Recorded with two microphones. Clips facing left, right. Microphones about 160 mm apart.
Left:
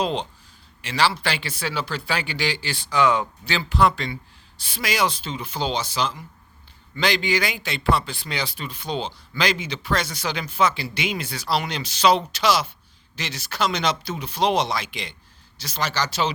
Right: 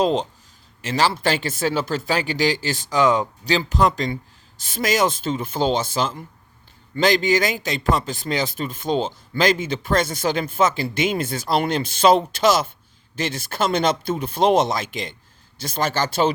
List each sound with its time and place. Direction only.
0.0 s a man's voice: 40° right (ahead or behind)